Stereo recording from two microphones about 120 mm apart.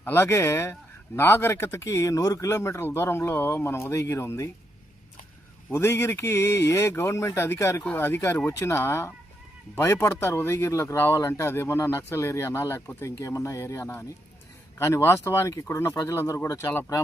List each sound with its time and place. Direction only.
0.0 s speech: 20° left (ahead or behind)
5.7 s speech: 20° left (ahead or behind)